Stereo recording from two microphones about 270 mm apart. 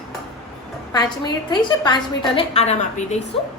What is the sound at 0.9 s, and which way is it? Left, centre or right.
A woman's voice, centre.